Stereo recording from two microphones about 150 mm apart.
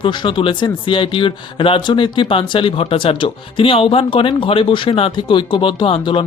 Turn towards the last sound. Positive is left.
turn(degrees=40)  # may be behind; listen again after turning